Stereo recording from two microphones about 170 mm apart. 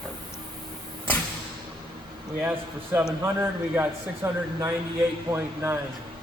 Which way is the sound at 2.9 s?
10° right (ahead or behind).